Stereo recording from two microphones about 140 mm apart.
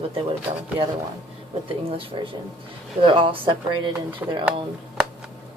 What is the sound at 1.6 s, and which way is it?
Speech, 40° right (ahead or behind).